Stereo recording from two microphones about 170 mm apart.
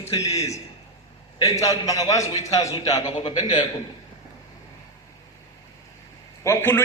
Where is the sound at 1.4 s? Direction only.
20° left (ahead or behind).